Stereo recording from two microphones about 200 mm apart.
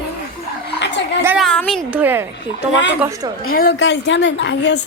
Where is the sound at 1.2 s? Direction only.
10° right (ahead or behind).